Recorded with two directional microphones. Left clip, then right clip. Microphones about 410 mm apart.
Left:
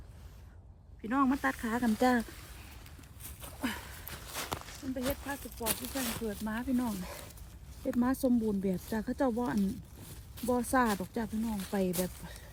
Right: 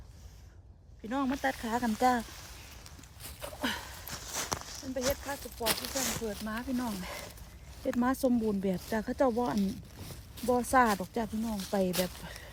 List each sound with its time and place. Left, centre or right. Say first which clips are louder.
1.0 s speech: left 2 dB; centre
4.3 s a sound: right 3 dB; right
4.9 s speech: right 4 dB; centre
5.4 s speech: right 4 dB; centre
6.2 s speech: even; centre